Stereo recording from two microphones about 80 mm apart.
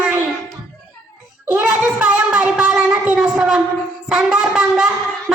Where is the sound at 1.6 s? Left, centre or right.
Centre.